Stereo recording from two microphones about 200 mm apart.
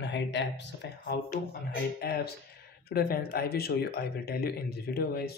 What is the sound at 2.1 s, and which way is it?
Speech, 55° left (ahead or behind).